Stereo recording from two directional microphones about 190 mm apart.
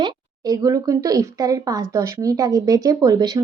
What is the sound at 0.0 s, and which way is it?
Speech, 20° right (ahead or behind).